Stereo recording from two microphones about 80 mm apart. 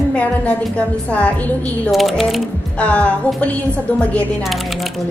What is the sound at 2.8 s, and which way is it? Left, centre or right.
A woman's voice, centre.